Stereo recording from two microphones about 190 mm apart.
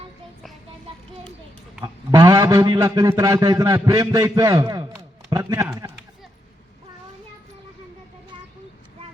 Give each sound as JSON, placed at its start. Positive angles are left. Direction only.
{"t": 1.8, "sound": "a man's voice", "side_deg": -15}